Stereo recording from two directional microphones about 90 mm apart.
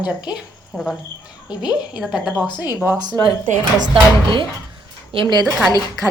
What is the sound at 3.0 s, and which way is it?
Speech, 55° right (ahead or behind).